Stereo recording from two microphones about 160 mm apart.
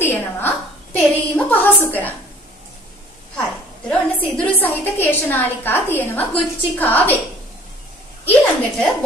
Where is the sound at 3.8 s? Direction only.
10° left (ahead or behind).